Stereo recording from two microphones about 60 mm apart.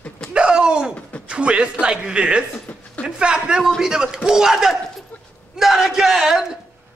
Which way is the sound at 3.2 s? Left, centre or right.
Centre.